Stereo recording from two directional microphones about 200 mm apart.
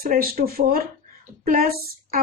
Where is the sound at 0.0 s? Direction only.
45° right (ahead or behind).